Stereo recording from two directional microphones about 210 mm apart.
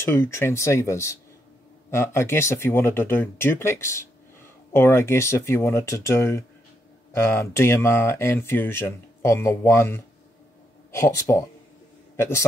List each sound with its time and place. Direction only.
0.1 s speech: 10° left (ahead or behind)